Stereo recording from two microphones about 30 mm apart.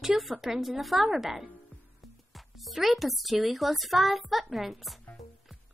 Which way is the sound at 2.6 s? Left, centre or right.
Centre.